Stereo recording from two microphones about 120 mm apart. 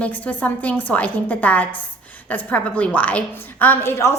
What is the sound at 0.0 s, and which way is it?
A woman's voice, 15° left (ahead or behind).